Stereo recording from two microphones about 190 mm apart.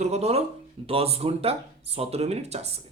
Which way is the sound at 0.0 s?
35° right (ahead or behind).